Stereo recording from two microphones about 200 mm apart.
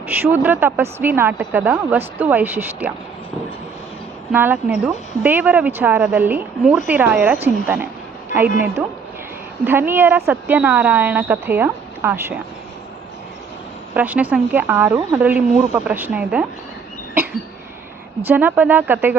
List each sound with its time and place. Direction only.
0.1 s a woman's voice: 10° right (ahead or behind)
4.3 s a woman's voice: 10° right (ahead or behind)
13.9 s a woman's voice: 10° right (ahead or behind)
18.2 s a woman's voice: 10° right (ahead or behind)